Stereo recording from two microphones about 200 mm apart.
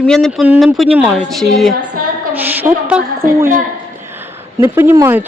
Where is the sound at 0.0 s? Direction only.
Centre (ahead or behind).